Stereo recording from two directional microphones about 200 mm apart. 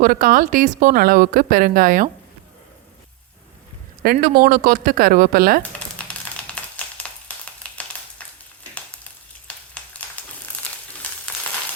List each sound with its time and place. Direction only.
0.0 s speech: 45° right (ahead or behind)
4.0 s speech: 50° right (ahead or behind)
6.0 s a sound: 5° left (ahead or behind)